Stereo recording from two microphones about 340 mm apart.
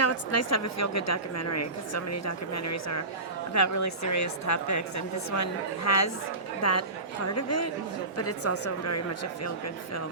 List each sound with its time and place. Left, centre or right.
0.0 s a woman's voice: left